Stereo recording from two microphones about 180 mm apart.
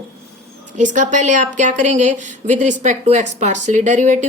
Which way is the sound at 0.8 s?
45° right (ahead or behind).